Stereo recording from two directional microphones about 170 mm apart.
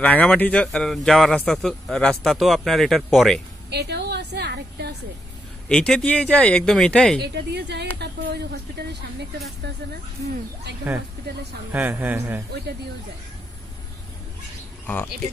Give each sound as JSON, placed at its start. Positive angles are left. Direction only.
{"t": 0.0, "sound": "speech", "side_deg": 10}
{"t": 3.7, "sound": "a woman's voice", "side_deg": -75}
{"t": 5.7, "sound": "speech", "side_deg": 5}
{"t": 7.2, "sound": "speech", "side_deg": -80}
{"t": 11.7, "sound": "speech", "side_deg": -10}